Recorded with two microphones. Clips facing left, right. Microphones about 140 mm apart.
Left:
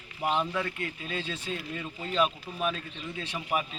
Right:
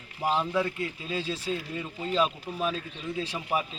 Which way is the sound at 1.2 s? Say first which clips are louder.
Right 4 dB; 35° right (ahead or behind).